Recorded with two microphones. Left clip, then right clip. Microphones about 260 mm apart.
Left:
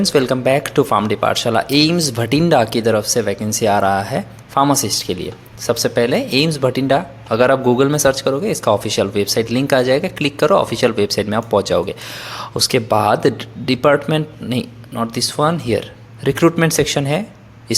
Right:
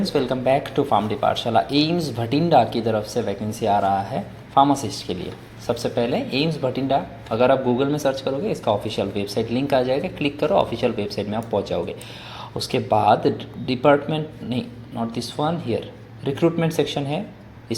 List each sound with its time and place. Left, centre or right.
0.0 s speech: left